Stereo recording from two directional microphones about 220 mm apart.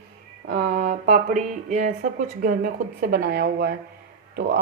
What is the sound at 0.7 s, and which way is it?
Speech, 35° right (ahead or behind).